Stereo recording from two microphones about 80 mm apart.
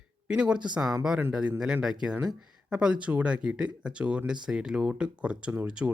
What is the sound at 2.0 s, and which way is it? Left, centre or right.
Speech, centre.